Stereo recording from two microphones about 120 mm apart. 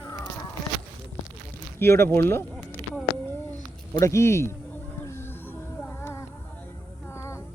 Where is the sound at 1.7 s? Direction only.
20° left (ahead or behind).